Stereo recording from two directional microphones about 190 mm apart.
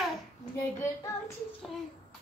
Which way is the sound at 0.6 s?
15° left (ahead or behind).